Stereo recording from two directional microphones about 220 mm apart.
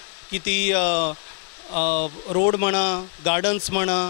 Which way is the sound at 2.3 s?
15° left (ahead or behind).